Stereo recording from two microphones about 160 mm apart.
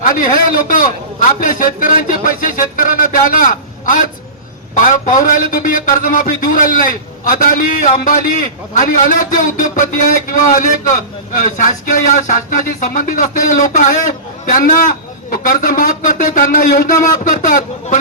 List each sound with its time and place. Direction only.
0.0 s a man's voice: 60° left (ahead or behind)